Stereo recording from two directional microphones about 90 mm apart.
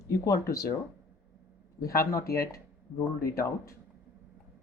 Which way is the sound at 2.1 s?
35° left (ahead or behind).